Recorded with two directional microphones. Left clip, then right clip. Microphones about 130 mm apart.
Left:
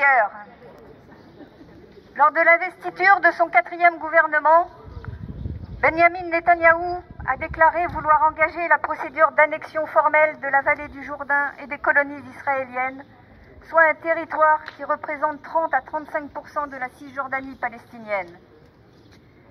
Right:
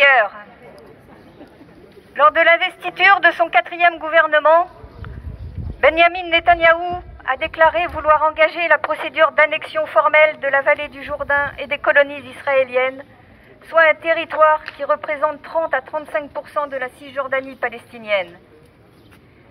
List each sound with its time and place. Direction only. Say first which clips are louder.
0.0 s a sound: right 5 dB; 30° right (ahead or behind)
2.1 s a man's voice: right 3 dB; 25° right (ahead or behind)
5.8 s speech: right 4 dB; 30° right (ahead or behind); by 9.1 s 55° right (ahead or behind)
9.1 s speech: right 3 dB; 25° right (ahead or behind)
17.6 s speech: right 4 dB; 50° right (ahead or behind)